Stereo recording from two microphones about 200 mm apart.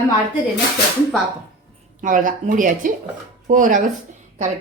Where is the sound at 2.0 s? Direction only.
40° right (ahead or behind).